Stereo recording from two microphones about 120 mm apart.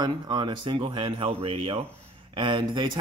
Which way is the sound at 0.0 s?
40° right (ahead or behind).